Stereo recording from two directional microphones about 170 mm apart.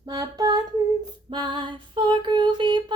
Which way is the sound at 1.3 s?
25° right (ahead or behind).